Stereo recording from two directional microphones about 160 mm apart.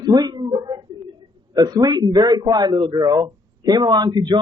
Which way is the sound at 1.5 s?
25° right (ahead or behind).